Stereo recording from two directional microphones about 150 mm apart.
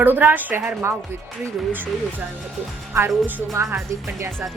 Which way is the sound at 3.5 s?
20° right (ahead or behind).